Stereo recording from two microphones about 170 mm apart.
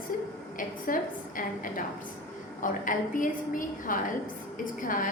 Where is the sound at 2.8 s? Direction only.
50° left (ahead or behind).